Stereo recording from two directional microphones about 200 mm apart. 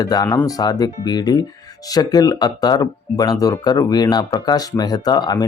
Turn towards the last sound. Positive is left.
turn(degrees=20)  # may be behind; listen again after turning